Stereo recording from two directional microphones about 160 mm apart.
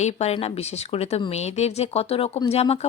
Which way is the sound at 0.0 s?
40° left (ahead or behind).